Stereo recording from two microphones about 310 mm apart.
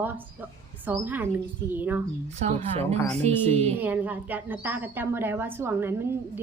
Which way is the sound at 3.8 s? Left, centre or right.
Centre.